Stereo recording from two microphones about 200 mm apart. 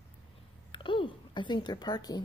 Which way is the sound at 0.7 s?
25° left (ahead or behind).